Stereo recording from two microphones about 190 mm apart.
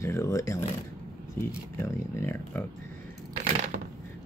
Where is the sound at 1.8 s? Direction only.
15° left (ahead or behind).